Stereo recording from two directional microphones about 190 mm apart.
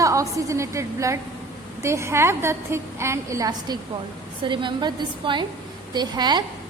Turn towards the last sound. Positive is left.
turn(degrees=-20)  # may be behind; listen again after turning